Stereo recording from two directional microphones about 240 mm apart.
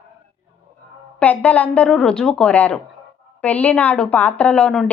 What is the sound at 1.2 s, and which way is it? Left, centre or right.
A woman's voice, centre.